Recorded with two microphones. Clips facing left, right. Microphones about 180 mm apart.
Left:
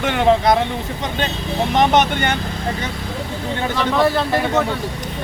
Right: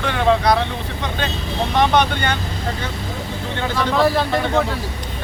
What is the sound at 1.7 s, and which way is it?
Speech, 20° left (ahead or behind).